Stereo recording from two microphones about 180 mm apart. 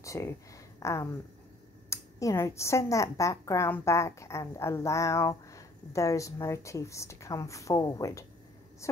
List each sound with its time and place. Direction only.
0.0 s speech: 15° left (ahead or behind)